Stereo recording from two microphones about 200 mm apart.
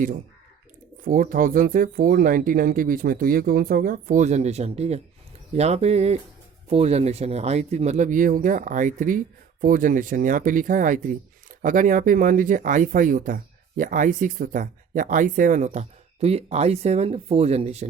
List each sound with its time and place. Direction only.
1.0 s speech: 45° right (ahead or behind)